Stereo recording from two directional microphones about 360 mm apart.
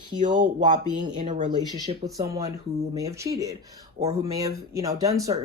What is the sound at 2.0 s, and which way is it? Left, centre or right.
Speech, centre.